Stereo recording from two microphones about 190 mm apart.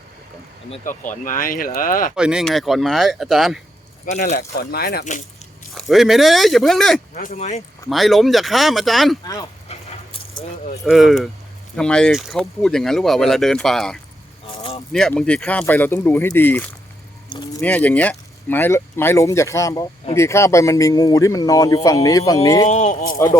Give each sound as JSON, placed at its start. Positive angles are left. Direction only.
{"t": 0.9, "sound": "speech", "side_deg": 45}
{"t": 2.1, "sound": "speech", "side_deg": -5}
{"t": 4.0, "sound": "speech", "side_deg": 40}
{"t": 4.4, "sound": "speech", "side_deg": 55}
{"t": 5.7, "sound": "speech", "side_deg": 0}
{"t": 7.1, "sound": "speech", "side_deg": 40}
{"t": 7.9, "sound": "speech", "side_deg": 0}
{"t": 9.2, "sound": "speech", "side_deg": 20}
{"t": 10.8, "sound": "speech", "side_deg": 0}
{"t": 22.6, "sound": "speech", "side_deg": 40}
{"t": 23.1, "sound": "speech", "side_deg": 15}